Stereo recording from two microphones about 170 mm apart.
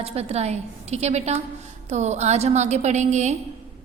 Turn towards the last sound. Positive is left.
turn(degrees=-45)  # may be behind; listen again after turning